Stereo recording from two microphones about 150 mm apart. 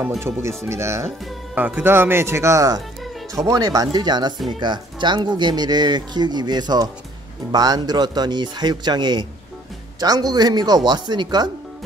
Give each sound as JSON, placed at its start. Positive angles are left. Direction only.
{"t": 0.7, "sound": "speech", "side_deg": -20}